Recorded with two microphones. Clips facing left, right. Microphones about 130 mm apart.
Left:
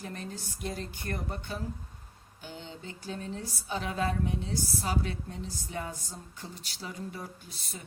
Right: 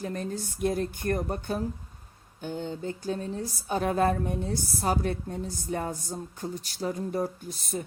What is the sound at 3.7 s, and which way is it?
A woman's voice, 50° right (ahead or behind).